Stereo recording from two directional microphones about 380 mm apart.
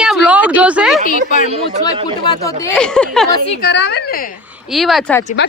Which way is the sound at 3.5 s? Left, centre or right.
Left.